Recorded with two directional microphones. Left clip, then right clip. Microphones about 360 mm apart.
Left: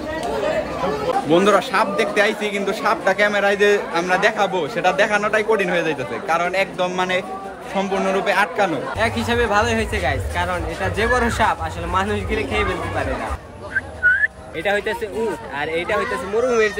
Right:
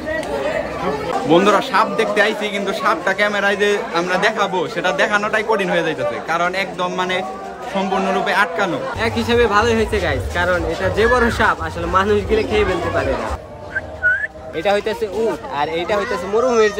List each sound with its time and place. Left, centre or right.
0.1 s speech: centre
14.6 s speech: centre